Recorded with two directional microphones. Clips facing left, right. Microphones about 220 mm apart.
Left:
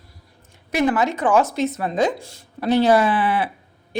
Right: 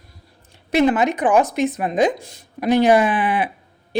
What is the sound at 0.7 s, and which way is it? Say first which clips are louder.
Speech: right 3 dB; 20° right (ahead or behind).